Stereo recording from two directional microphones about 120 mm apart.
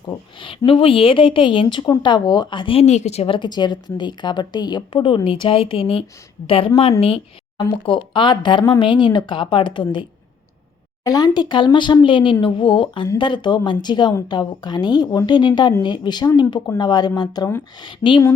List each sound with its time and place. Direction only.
0.3 s a woman's voice: 45° left (ahead or behind)
2.8 s a woman's voice: 70° left (ahead or behind); by 18.2 s 40° left (ahead or behind)